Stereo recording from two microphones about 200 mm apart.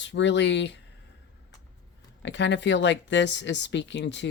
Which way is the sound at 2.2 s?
65° left (ahead or behind).